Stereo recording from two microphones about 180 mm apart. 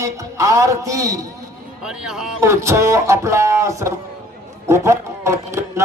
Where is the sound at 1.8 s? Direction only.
5° right (ahead or behind).